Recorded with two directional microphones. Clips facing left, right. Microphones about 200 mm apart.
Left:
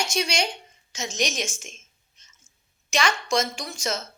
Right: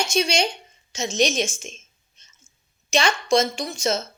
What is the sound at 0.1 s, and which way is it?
Speech, 25° right (ahead or behind).